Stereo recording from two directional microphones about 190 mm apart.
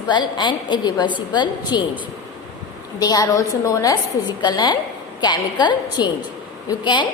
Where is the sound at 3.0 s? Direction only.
20° left (ahead or behind).